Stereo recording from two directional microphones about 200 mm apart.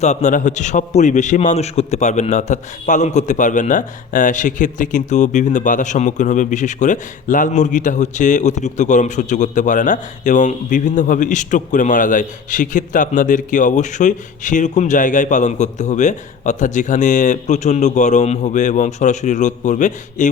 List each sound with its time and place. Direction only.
0.0 s a man's voice: 35° left (ahead or behind)